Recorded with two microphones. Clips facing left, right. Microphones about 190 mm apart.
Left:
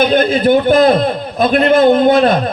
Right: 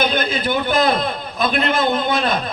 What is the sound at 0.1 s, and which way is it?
A man's voice, 50° left (ahead or behind).